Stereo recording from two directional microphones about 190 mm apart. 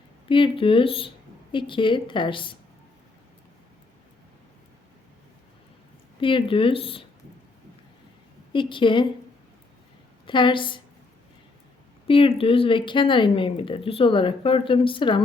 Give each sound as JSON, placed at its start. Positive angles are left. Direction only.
{"t": 0.3, "sound": "speech", "side_deg": 25}
{"t": 6.1, "sound": "speech", "side_deg": 25}
{"t": 8.5, "sound": "speech", "side_deg": 25}
{"t": 10.2, "sound": "speech", "side_deg": 25}
{"t": 12.0, "sound": "speech", "side_deg": 25}